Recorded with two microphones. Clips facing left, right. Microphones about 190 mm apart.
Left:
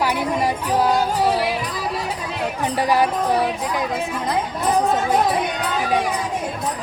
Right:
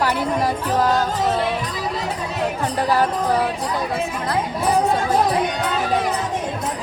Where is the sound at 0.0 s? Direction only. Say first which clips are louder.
Even; 10° left (ahead or behind).